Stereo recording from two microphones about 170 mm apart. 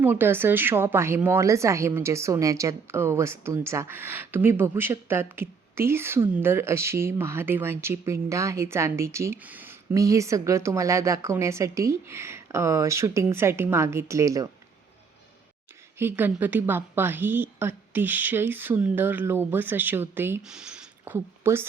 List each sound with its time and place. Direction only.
0.0 s speech: 10° right (ahead or behind)
16.0 s speech: 10° right (ahead or behind)